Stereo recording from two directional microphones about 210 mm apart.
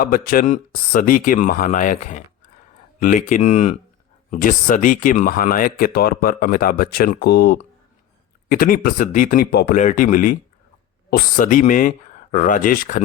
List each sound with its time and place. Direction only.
0.0 s speech: 40° left (ahead or behind)